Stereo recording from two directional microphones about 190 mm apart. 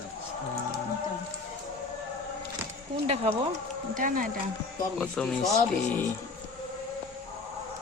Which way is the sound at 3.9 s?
45° right (ahead or behind).